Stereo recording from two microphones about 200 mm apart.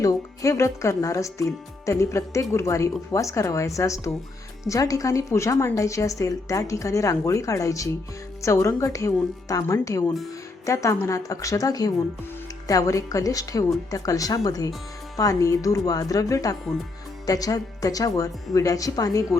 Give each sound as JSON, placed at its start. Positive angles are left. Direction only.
{"t": 0.0, "sound": "speech", "side_deg": 15}